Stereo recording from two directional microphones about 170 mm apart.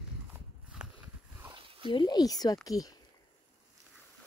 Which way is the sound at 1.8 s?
25° left (ahead or behind).